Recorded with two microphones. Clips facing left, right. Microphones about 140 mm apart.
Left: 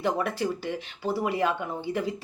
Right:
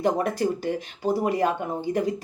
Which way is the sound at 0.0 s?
40° right (ahead or behind).